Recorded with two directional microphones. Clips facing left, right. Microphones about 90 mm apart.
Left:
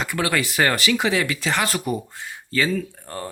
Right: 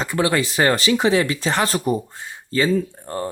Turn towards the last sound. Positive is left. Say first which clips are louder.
# right 5 dB
turn(degrees=-30)  # may be behind; listen again after turning